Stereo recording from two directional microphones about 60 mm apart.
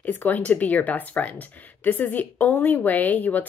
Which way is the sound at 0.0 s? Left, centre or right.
Left.